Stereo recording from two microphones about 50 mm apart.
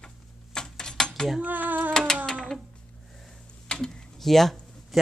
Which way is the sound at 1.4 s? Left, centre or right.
Right.